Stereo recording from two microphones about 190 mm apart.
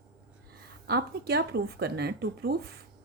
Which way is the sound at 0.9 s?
55° right (ahead or behind).